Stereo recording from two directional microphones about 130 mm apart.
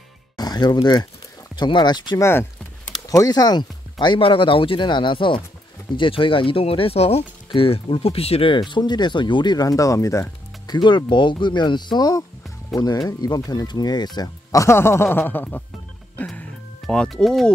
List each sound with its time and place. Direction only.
0.4 s speech: 30° left (ahead or behind)
10.7 s speech: 35° left (ahead or behind); by 15.6 s 15° left (ahead or behind)
16.3 s music: 5° left (ahead or behind)